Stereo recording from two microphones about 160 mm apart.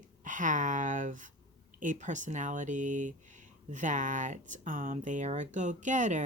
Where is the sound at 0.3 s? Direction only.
55° right (ahead or behind).